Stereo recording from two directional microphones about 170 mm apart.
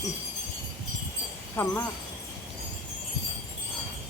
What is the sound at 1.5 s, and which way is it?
Speech, 15° left (ahead or behind).